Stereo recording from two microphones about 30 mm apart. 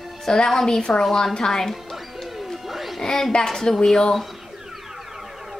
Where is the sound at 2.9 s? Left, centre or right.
Centre.